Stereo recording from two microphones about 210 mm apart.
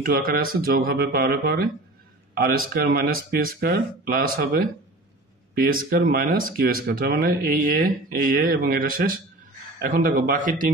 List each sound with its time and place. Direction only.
0.0 s speech: 45° right (ahead or behind)